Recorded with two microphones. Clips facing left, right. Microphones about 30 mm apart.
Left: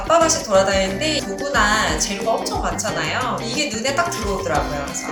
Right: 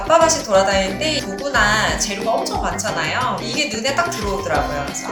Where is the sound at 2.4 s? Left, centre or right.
Centre.